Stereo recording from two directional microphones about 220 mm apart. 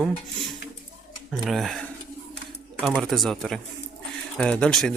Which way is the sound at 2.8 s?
Centre (ahead or behind).